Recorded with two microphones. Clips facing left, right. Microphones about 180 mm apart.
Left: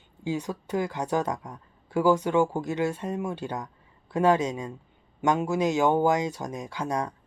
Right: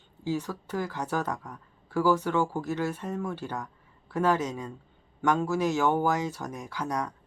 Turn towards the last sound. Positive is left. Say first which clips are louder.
# left 2 dB
turn(degrees=25)  # may be behind; listen again after turning